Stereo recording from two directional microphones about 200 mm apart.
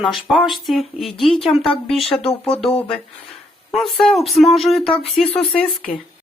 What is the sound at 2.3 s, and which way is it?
Speech, 30° left (ahead or behind).